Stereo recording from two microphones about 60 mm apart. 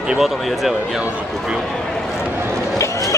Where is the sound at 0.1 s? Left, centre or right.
Centre.